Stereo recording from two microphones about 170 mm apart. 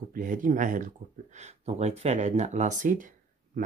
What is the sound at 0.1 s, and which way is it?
Speech, 50° right (ahead or behind).